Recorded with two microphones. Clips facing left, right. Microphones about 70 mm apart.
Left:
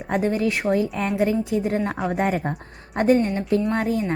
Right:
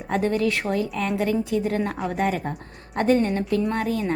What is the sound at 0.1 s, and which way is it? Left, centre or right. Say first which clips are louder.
A woman's voice: even; centre.